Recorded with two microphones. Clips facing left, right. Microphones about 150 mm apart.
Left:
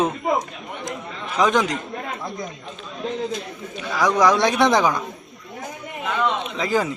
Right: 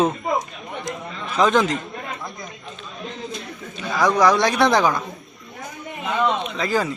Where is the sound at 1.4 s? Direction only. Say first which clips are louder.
Right 1 dB; 10° left (ahead or behind).